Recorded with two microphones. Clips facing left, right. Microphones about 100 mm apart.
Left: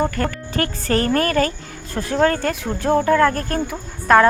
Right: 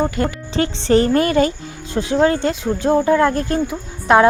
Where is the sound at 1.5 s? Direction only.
50° left (ahead or behind).